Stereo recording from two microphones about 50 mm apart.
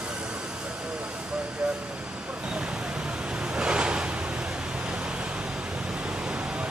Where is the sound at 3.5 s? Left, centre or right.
Centre.